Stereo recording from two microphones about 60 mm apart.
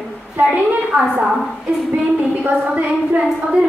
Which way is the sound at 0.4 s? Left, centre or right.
Right.